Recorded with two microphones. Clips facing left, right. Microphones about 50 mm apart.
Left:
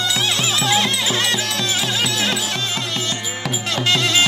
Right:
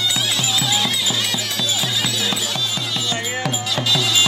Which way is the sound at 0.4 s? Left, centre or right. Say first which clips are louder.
Left 3 dB; left.